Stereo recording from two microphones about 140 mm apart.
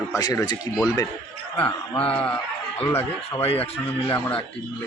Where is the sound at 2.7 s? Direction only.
45° left (ahead or behind).